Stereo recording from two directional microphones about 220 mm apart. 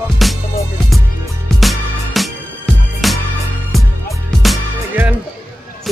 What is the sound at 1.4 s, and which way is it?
Music, centre (ahead or behind).